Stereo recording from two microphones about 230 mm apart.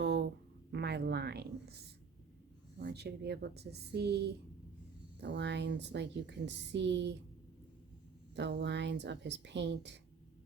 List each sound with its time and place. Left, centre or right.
0.0 s a sound: right
0.7 s speech: right
2.7 s a woman's voice: right
8.4 s a woman's voice: right